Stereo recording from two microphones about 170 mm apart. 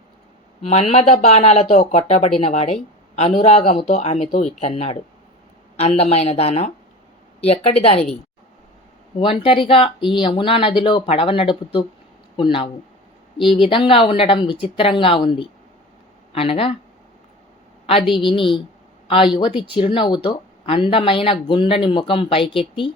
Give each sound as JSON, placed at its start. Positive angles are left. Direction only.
{"t": 0.6, "sound": "speech", "side_deg": 40}
{"t": 9.2, "sound": "a woman's voice", "side_deg": 35}
{"t": 17.8, "sound": "a woman's voice", "side_deg": 30}